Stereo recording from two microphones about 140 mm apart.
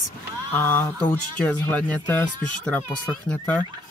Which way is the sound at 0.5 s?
15° left (ahead or behind).